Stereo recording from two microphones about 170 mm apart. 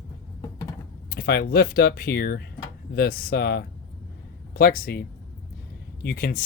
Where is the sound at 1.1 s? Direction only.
70° left (ahead or behind).